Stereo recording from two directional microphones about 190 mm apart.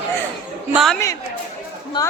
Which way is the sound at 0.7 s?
Centre (ahead or behind).